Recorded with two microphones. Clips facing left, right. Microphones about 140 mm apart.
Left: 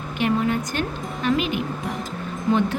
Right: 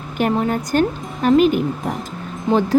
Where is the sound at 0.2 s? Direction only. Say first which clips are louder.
Right 3 dB; 40° right (ahead or behind).